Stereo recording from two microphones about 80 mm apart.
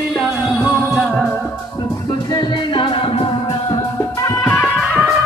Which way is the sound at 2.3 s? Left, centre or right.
Left.